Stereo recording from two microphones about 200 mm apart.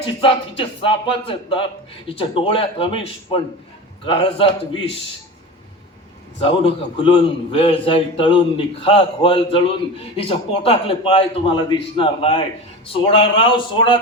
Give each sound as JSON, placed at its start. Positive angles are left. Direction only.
{"t": 0.0, "sound": "a man's voice", "side_deg": 25}
{"t": 6.4, "sound": "a man's voice", "side_deg": 25}